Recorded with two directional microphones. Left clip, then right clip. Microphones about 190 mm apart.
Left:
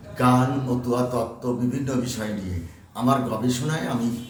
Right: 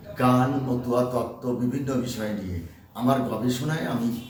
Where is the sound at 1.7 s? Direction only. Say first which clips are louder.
Left 1 dB; 10° left (ahead or behind).